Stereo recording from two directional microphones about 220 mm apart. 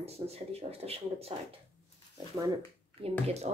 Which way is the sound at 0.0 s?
25° right (ahead or behind).